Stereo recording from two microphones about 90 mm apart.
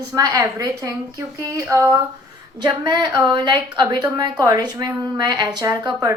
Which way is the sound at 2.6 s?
55° right (ahead or behind).